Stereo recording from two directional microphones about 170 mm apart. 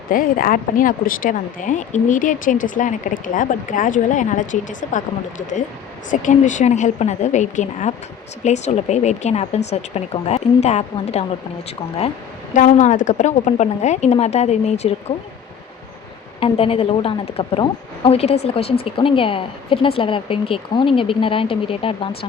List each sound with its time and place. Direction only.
0.1 s speech: 55° left (ahead or behind)
6.1 s speech: 45° left (ahead or behind)
12.5 s speech: 45° left (ahead or behind)
16.4 s speech: 35° left (ahead or behind)